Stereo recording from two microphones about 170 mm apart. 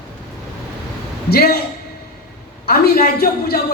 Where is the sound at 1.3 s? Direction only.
65° left (ahead or behind).